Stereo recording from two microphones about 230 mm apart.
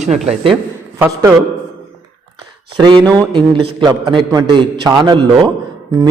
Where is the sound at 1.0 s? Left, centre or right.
Centre.